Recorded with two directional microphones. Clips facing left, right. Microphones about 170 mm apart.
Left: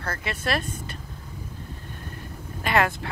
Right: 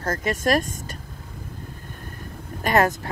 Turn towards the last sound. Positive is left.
turn(degrees=-40)  # may be behind; listen again after turning